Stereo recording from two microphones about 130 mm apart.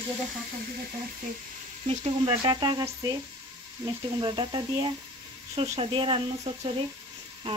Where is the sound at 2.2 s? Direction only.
30° right (ahead or behind).